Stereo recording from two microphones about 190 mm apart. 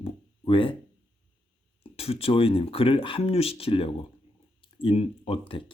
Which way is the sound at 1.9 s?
30° left (ahead or behind).